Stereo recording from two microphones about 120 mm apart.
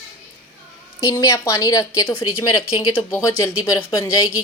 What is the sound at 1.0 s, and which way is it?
A woman's voice, 30° left (ahead or behind).